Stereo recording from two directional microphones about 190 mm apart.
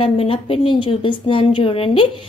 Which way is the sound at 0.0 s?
30° left (ahead or behind).